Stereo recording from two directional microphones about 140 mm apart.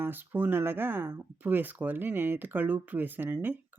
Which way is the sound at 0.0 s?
15° right (ahead or behind).